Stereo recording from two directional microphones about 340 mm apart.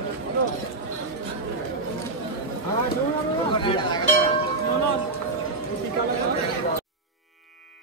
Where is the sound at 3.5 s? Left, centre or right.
Centre.